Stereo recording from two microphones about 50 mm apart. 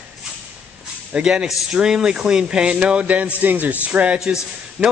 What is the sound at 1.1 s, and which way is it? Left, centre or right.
A man's voice, centre.